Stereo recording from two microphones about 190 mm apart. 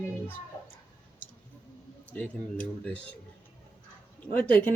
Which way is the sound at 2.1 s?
5° left (ahead or behind).